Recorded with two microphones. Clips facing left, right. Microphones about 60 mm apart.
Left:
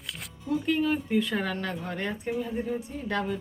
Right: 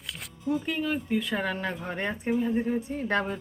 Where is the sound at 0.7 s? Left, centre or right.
Centre.